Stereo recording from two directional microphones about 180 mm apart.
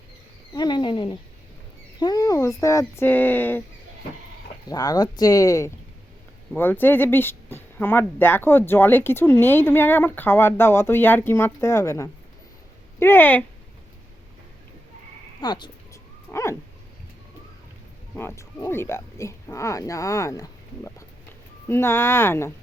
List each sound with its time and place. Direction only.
0.5 s speech: 25° left (ahead or behind)
4.7 s speech: 20° left (ahead or behind)
15.4 s dog: 25° left (ahead or behind)
18.2 s speech: 15° left (ahead or behind)